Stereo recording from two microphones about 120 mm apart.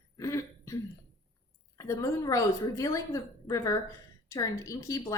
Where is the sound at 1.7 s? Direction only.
25° left (ahead or behind).